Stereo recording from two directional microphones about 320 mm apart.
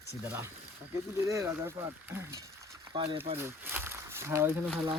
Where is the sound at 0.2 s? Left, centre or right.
Centre.